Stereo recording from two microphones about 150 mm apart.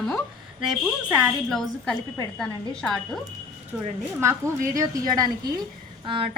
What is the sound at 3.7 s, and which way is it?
Speech, 10° right (ahead or behind).